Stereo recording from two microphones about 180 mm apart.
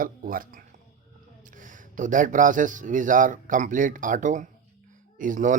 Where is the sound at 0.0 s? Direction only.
50° right (ahead or behind).